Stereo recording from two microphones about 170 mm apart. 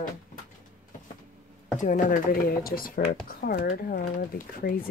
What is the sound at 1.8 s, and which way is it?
Speech, 50° left (ahead or behind).